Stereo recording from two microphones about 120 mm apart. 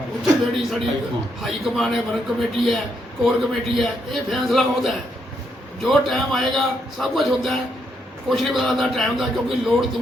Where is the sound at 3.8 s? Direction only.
Centre (ahead or behind).